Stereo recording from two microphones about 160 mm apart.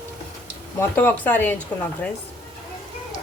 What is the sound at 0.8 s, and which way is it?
Speech, 15° left (ahead or behind).